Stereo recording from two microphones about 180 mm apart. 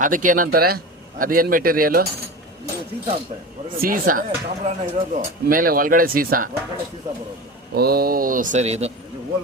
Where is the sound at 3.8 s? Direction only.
50° right (ahead or behind).